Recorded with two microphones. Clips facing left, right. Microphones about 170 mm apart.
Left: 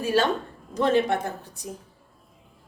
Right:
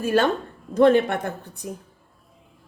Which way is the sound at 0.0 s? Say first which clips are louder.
Right 2 dB; 55° right (ahead or behind).